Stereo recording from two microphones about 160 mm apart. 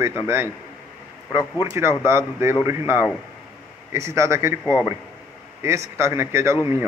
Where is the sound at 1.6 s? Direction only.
15° right (ahead or behind).